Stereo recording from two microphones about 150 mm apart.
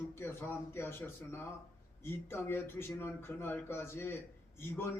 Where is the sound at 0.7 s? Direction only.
15° left (ahead or behind).